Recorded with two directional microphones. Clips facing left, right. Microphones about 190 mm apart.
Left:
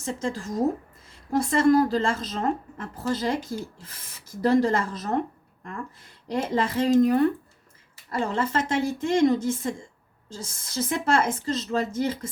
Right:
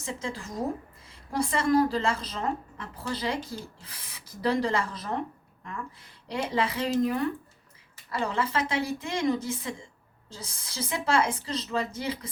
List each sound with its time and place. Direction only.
0.0 s speech: 45° left (ahead or behind)